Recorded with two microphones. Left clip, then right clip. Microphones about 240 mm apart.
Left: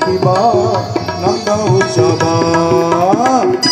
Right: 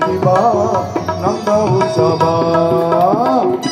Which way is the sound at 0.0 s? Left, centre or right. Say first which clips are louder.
Left 1 dB; left.